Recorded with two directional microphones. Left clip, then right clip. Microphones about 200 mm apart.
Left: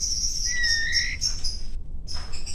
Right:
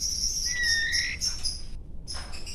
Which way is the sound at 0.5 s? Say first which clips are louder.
Left 2 dB; 20° right (ahead or behind).